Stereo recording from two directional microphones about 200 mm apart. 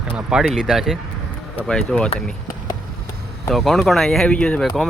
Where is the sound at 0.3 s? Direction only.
5° right (ahead or behind).